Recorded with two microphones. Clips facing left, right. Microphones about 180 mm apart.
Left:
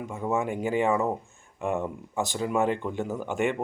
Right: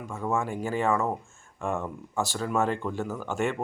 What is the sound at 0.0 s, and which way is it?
Speech, 20° left (ahead or behind).